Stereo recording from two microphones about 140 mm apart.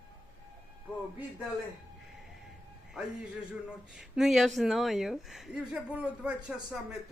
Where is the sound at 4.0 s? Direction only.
5° right (ahead or behind).